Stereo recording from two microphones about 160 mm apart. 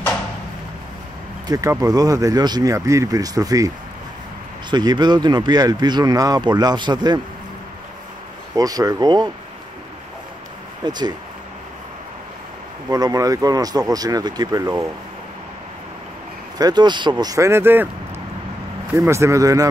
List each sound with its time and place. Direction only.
1.5 s speech: 20° right (ahead or behind)
8.5 s speech: 25° right (ahead or behind)
10.8 s speech: 25° right (ahead or behind)
12.9 s speech: 25° right (ahead or behind)
16.5 s speech: 25° right (ahead or behind)
18.9 s speech: 15° right (ahead or behind)